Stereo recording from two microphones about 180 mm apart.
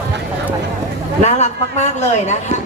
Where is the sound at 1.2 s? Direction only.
40° left (ahead or behind).